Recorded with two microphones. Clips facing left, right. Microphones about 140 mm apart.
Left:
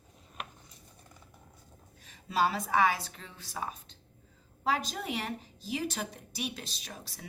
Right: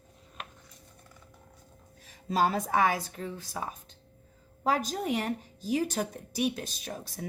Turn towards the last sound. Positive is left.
turn(degrees=-50)  # may be behind; listen again after turning